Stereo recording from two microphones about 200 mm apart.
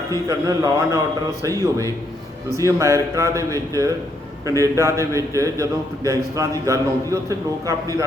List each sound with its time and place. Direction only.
0.3 s a man's voice: 15° right (ahead or behind)